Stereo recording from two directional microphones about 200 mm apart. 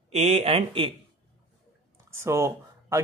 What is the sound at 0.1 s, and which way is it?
Speech, 30° right (ahead or behind).